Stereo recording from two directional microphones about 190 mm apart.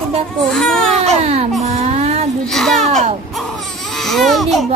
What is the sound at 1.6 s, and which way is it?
Baby cry, 35° right (ahead or behind).